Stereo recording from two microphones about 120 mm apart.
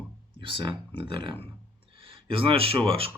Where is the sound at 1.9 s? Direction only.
50° right (ahead or behind).